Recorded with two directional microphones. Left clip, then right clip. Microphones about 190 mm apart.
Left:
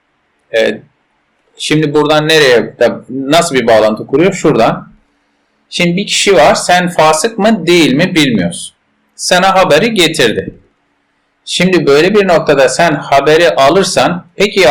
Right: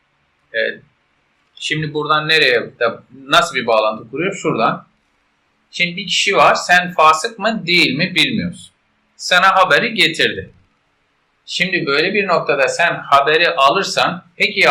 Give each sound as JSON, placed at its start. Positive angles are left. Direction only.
{"t": 0.5, "sound": "a man's voice", "side_deg": 25}
{"t": 5.6, "sound": "a man's voice", "side_deg": 35}
{"t": 11.4, "sound": "speech", "side_deg": 35}